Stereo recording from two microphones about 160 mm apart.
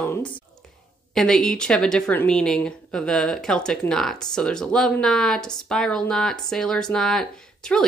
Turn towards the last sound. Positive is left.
turn(degrees=5)  # may be behind; listen again after turning